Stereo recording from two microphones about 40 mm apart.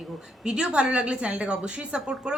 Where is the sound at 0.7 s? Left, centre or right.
Right.